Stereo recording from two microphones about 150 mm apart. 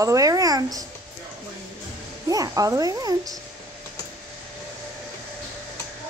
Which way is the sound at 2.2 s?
25° right (ahead or behind).